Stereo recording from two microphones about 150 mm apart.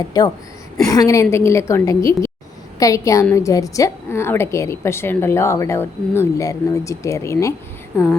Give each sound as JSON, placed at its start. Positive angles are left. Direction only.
{"t": 0.1, "sound": "a woman's voice", "side_deg": 25}